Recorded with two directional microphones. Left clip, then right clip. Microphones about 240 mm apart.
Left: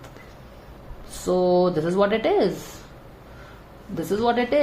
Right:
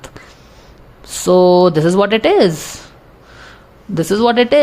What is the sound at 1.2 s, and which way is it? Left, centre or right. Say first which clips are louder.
Speech: right 10 dB; right.